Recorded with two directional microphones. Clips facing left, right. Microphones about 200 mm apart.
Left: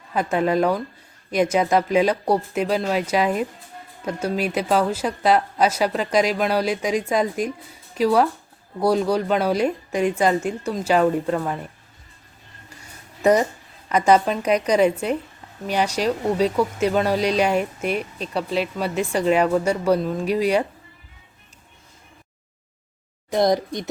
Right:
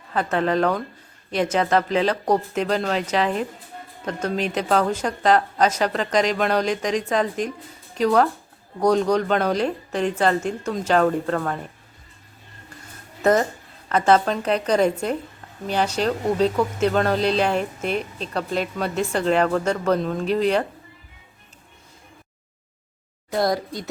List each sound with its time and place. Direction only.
0.1 s speech: 10° left (ahead or behind)
13.2 s speech: 10° left (ahead or behind)
23.3 s speech: 20° left (ahead or behind)